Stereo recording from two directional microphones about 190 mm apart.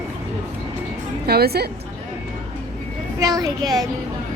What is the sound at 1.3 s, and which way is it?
Speech, 55° right (ahead or behind).